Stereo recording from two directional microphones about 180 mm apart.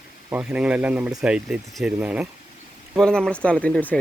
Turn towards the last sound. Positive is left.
turn(degrees=10)  # may be behind; listen again after turning